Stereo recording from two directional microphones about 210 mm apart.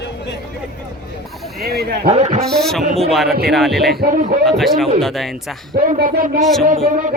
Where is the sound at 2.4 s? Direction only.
Centre (ahead or behind).